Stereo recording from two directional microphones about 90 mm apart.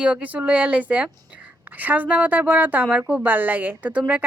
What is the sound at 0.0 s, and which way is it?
A woman's voice, 15° right (ahead or behind).